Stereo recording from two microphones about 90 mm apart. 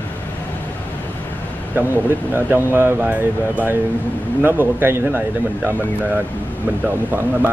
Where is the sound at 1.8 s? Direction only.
20° right (ahead or behind).